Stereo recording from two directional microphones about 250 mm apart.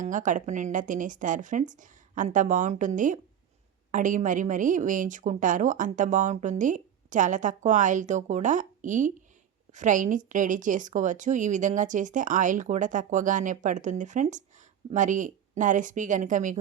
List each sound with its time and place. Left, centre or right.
0.0 s a woman's voice: right